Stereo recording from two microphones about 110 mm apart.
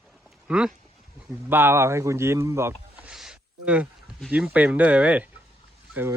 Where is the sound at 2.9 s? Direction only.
5° right (ahead or behind).